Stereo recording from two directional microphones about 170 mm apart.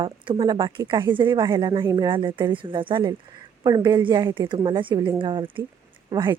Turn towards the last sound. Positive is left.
turn(degrees=-25)  # may be behind; listen again after turning